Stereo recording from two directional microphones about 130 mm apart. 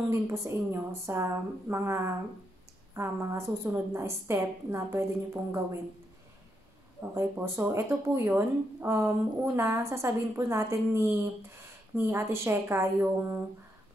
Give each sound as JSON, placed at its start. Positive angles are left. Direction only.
{"t": 0.1, "sound": "speech", "side_deg": -20}
{"t": 7.0, "sound": "speech", "side_deg": -20}